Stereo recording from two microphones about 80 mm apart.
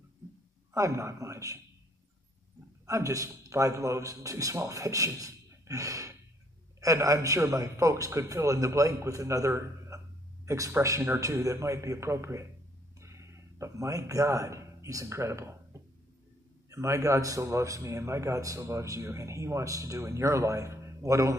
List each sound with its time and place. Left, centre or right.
0.7 s a man's voice: right
2.9 s a man's voice: right
16.7 s a man's voice: right